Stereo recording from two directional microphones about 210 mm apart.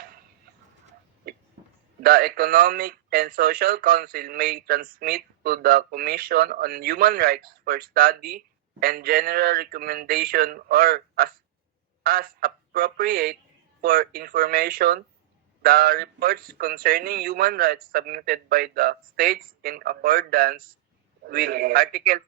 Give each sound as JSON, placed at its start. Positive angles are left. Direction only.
{"t": 2.0, "sound": "speech", "side_deg": -45}